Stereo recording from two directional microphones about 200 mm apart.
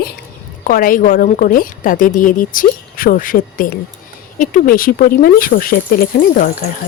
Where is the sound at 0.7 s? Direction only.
45° left (ahead or behind).